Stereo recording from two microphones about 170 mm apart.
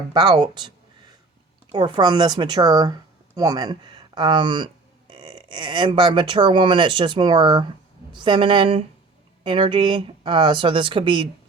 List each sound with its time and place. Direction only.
0.1 s speech: 25° right (ahead or behind)
1.7 s speech: 25° right (ahead or behind)